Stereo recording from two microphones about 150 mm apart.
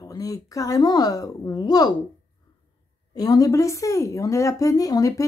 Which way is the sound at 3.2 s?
25° left (ahead or behind).